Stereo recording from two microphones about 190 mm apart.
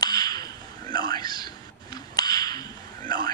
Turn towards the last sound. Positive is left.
turn(degrees=-45)  # may be behind; listen again after turning